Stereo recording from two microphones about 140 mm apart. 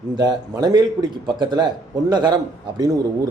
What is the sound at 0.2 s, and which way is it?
A man's voice, 30° right (ahead or behind).